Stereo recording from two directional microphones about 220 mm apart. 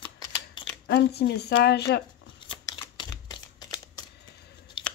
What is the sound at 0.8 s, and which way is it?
Speech, 50° left (ahead or behind).